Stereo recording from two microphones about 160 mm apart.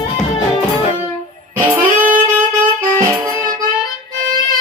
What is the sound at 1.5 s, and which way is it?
Music, 10° right (ahead or behind).